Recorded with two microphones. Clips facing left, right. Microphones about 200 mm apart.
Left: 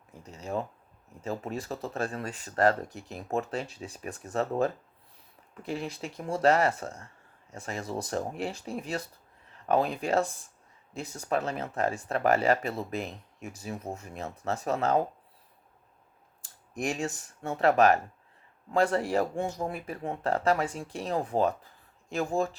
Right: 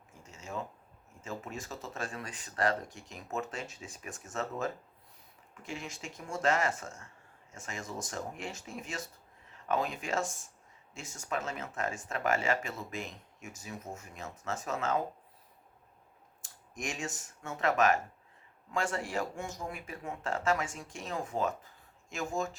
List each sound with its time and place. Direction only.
0.1 s a sound: 35° left (ahead or behind)
1.2 s speech: 35° left (ahead or behind)
16.4 s speech: 35° left (ahead or behind)